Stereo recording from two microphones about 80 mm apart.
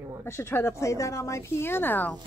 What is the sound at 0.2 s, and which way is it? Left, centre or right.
Speech, left.